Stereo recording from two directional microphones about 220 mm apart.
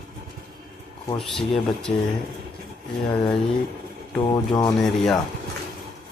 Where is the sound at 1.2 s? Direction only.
Centre (ahead or behind).